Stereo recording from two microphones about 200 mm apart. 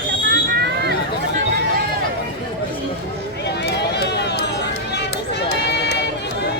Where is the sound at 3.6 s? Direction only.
60° left (ahead or behind).